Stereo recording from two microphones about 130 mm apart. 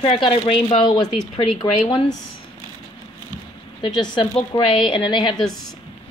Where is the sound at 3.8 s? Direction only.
35° left (ahead or behind).